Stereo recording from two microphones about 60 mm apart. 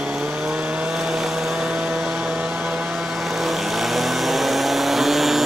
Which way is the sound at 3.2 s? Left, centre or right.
Centre.